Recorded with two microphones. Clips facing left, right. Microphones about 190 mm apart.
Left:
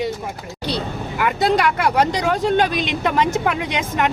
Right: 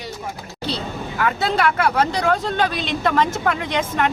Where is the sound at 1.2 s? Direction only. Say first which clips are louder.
Left 2 dB; 15° left (ahead or behind).